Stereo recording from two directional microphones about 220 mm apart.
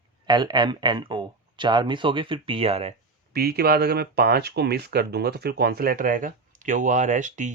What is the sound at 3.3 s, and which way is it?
Speech, 45° right (ahead or behind).